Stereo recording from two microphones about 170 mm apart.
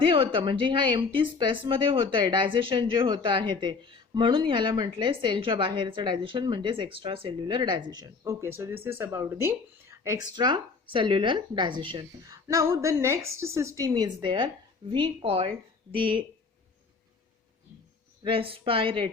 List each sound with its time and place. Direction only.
0.0 s speech: 30° right (ahead or behind)
10.3 s speech: 25° right (ahead or behind)
18.2 s speech: 30° right (ahead or behind)